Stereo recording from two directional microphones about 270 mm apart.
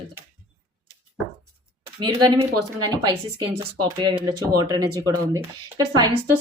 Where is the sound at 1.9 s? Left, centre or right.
Centre.